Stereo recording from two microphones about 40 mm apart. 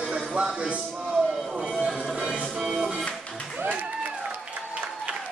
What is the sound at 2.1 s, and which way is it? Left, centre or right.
Music, right.